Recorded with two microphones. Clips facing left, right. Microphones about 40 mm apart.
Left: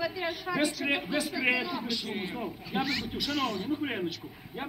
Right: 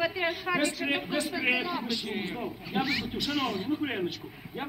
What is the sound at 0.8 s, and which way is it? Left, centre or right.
A man's voice, centre.